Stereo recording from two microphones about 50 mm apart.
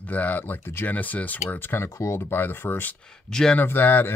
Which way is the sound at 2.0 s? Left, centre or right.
Left.